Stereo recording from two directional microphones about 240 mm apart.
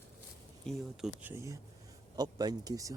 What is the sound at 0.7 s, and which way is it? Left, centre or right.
Speech, centre.